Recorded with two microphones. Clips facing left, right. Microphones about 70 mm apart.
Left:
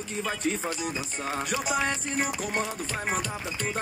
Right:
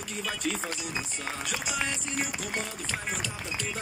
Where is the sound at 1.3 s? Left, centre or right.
Left.